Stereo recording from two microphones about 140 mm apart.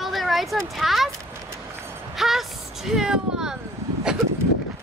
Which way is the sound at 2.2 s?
Centre (ahead or behind).